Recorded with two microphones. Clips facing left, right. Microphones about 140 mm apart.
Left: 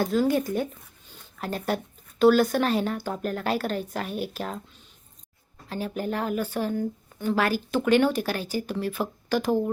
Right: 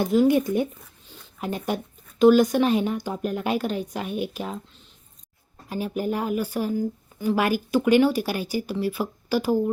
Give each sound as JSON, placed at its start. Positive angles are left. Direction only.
{"t": 0.0, "sound": "speech", "side_deg": -20}
{"t": 2.2, "sound": "speech", "side_deg": -15}
{"t": 5.6, "sound": "speech", "side_deg": -10}